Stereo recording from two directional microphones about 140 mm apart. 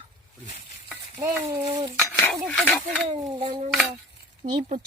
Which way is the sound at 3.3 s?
35° right (ahead or behind).